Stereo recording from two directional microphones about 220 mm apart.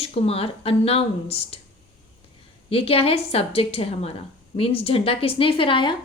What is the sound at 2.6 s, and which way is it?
A woman's voice, 25° left (ahead or behind).